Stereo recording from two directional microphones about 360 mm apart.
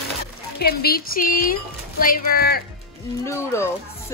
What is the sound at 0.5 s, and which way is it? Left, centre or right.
Speech, left.